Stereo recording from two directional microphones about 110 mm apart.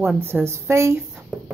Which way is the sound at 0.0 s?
15° right (ahead or behind).